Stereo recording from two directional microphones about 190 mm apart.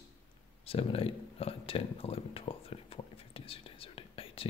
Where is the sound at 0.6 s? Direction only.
30° left (ahead or behind).